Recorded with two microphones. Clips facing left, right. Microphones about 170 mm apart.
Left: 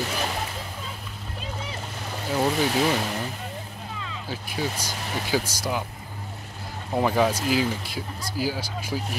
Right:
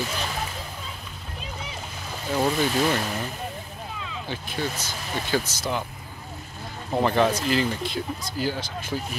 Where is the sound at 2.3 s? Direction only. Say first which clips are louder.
Even; 5° left (ahead or behind).